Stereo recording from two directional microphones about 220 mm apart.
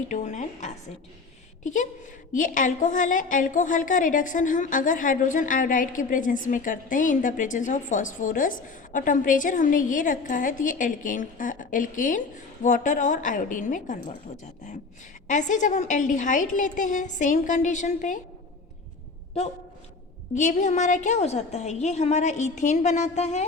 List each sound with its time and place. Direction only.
0.1 s a woman's voice: 35° left (ahead or behind)
15.3 s a woman's voice: 35° left (ahead or behind)
20.3 s a woman's voice: 35° left (ahead or behind)